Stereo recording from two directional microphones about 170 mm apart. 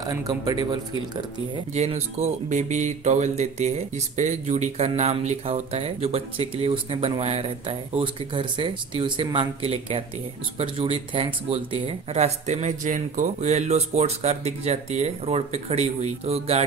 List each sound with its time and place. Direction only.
0.3 s speech: 25° right (ahead or behind)
1.7 s speech: 40° right (ahead or behind)